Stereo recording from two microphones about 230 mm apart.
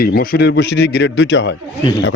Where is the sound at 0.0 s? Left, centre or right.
Left.